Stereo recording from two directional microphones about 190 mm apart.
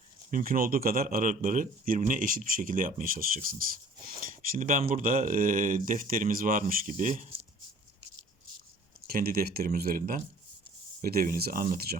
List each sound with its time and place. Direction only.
0.3 s speech: 45° right (ahead or behind)
9.0 s speech: 50° right (ahead or behind)